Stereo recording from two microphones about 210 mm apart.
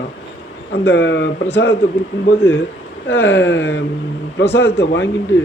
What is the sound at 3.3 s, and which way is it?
Speech, 60° left (ahead or behind).